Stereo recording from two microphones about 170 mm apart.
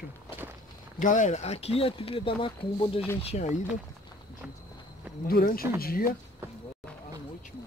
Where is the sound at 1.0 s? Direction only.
45° left (ahead or behind); by 2.9 s 30° left (ahead or behind).